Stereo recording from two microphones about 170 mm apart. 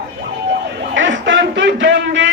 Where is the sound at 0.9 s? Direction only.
90° right.